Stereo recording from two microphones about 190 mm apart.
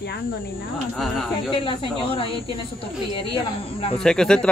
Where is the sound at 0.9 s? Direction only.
Centre (ahead or behind).